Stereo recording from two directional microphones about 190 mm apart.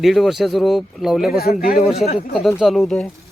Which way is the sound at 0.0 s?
Centre (ahead or behind).